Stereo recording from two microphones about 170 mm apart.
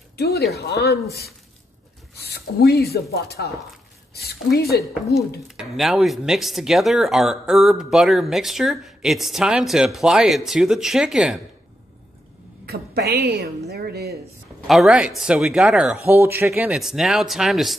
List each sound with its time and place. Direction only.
0.5 s speech: 70° left (ahead or behind)
5.6 s speech: centre (ahead or behind)
12.6 s a woman's voice: 65° right (ahead or behind)
14.7 s speech: centre (ahead or behind)